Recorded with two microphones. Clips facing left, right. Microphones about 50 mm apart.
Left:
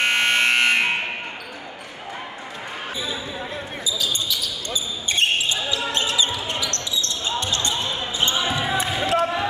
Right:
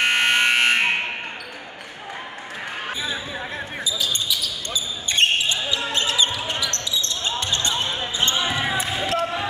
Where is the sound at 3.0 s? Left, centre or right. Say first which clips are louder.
Right 1 dB; right.